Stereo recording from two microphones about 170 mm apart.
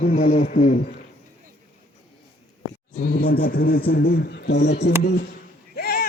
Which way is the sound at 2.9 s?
55° left (ahead or behind).